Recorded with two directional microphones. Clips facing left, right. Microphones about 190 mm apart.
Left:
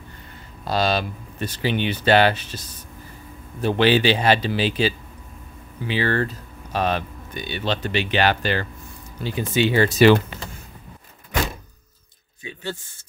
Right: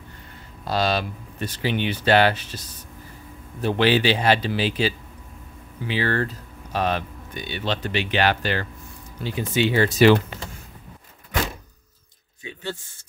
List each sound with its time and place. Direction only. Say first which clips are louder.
0.7 s speech: left 1 dB; 25° left (ahead or behind)
3.6 s speech: left 2 dB; 30° left (ahead or behind)